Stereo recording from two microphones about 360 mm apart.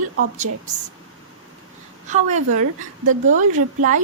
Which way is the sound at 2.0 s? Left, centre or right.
Centre.